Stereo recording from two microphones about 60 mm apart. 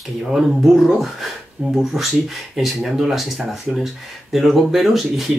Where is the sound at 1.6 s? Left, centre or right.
Centre.